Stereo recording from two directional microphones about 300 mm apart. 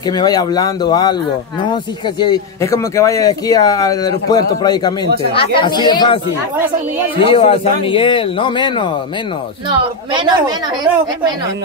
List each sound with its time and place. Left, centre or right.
0.0 s speech: centre
2.1 s speech: centre
7.2 s a man's voice: centre
9.7 s speech: centre